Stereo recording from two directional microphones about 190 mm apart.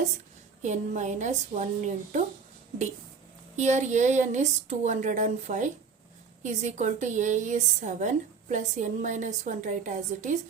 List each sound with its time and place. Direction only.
0.6 s a woman's voice: 40° right (ahead or behind)
3.5 s a woman's voice: 40° right (ahead or behind)